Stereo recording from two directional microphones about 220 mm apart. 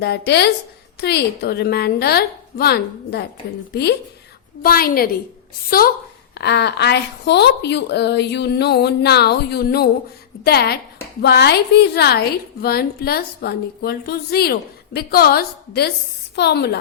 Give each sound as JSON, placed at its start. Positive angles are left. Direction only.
{"t": 0.0, "sound": "a woman's voice", "side_deg": 50}
{"t": 4.6, "sound": "a woman's voice", "side_deg": 45}